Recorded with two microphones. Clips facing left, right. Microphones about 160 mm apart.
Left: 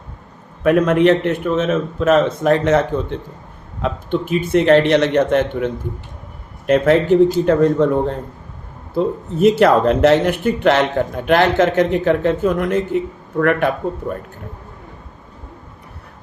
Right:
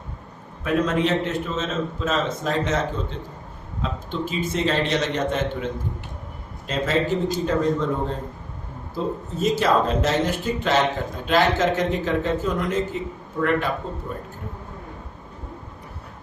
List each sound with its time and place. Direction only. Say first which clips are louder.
0.6 s speech: left 9 dB; 65° left (ahead or behind)
9.4 s speech: left 8 dB; 60° left (ahead or behind)